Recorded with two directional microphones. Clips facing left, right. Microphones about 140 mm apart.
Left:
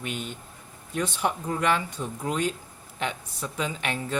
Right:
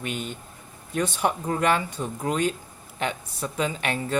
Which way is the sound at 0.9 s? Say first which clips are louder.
Right 3 dB; 45° right (ahead or behind).